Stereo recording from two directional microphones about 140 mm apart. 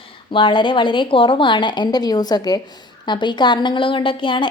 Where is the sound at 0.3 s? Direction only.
35° left (ahead or behind).